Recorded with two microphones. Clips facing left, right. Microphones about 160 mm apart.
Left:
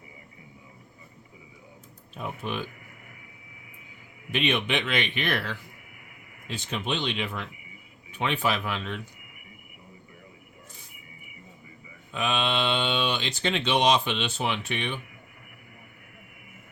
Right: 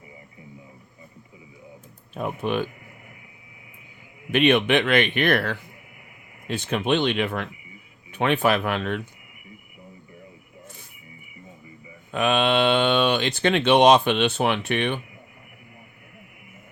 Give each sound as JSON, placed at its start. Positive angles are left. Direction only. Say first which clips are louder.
{"t": 2.1, "sound": "speech", "louder": "right 7 dB", "side_deg": -55}
{"t": 4.3, "sound": "speech", "louder": "right 8 dB", "side_deg": -55}
{"t": 12.1, "sound": "speech", "louder": "right 7 dB", "side_deg": -55}